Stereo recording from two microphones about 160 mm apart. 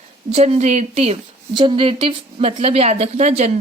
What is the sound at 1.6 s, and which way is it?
A woman's voice, 30° right (ahead or behind).